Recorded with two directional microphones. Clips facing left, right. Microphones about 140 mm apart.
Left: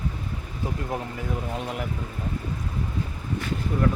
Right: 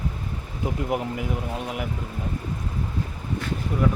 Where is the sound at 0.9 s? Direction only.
15° right (ahead or behind).